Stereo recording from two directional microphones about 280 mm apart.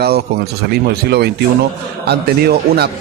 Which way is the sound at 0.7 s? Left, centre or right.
Right.